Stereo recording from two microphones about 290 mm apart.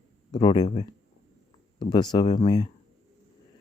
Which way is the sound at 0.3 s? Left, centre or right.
Centre.